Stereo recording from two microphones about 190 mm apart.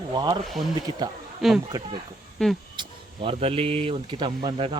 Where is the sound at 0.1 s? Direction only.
20° right (ahead or behind).